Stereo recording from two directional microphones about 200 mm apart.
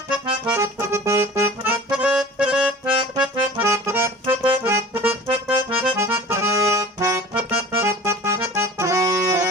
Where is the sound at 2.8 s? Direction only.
25° right (ahead or behind).